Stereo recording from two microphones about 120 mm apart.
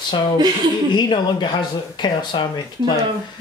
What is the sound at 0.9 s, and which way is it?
Speech, 40° left (ahead or behind).